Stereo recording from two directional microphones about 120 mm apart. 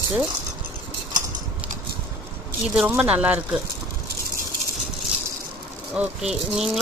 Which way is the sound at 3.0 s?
10° right (ahead or behind).